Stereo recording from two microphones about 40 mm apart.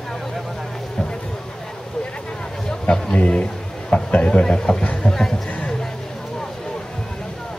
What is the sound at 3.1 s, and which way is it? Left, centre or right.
A man's voice, left.